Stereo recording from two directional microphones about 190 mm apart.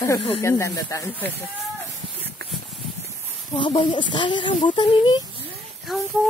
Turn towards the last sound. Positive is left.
turn(degrees=0)  # may be behind; listen again after turning